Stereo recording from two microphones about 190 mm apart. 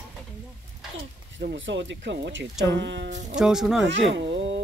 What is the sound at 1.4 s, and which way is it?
Speech, 70° right (ahead or behind).